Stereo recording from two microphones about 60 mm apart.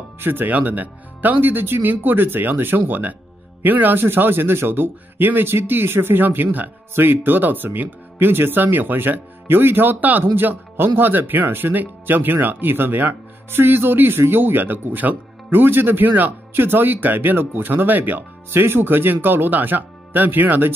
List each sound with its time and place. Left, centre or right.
0.2 s speech: right
18.5 s speech: right